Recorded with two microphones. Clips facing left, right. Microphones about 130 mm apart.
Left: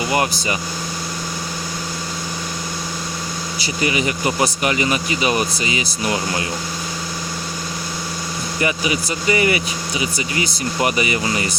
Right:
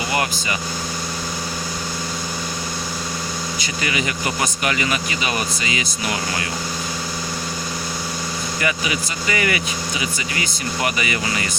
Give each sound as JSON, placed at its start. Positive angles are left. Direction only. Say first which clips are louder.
{"t": 3.6, "sound": "speech", "louder": "left 6 dB", "side_deg": 35}
{"t": 8.6, "sound": "speech", "louder": "left 4 dB", "side_deg": 30}
{"t": 10.9, "sound": "speech", "louder": "left 3 dB", "side_deg": 35}